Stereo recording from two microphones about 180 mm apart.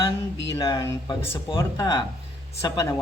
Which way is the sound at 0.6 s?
20° left (ahead or behind).